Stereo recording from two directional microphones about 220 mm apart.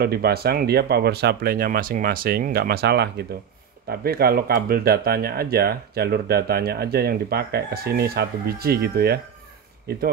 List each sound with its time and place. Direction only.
0.0 s speech: 45° right (ahead or behind)